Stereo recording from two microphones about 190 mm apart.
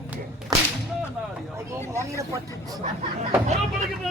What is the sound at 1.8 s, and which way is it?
Speech, 15° left (ahead or behind).